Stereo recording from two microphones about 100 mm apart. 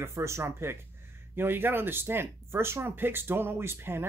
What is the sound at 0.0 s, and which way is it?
Speech, 30° right (ahead or behind).